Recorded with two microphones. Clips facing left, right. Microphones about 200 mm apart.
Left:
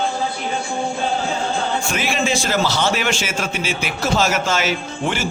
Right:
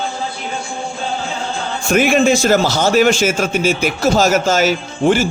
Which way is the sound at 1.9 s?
50° right (ahead or behind).